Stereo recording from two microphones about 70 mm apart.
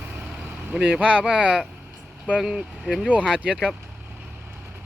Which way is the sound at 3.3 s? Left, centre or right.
Centre.